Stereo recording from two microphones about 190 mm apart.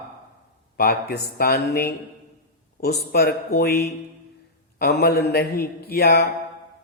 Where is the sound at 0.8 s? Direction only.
50° left (ahead or behind).